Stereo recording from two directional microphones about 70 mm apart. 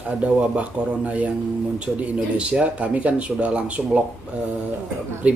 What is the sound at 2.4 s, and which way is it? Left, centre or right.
Speech, centre.